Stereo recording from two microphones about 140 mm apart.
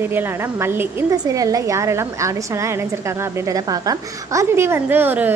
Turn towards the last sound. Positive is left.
turn(degrees=-15)  # may be behind; listen again after turning